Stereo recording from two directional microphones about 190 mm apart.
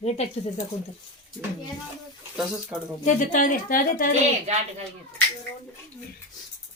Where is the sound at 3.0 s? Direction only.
40° left (ahead or behind).